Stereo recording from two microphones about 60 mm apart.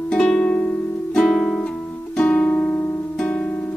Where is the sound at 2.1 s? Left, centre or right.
Left.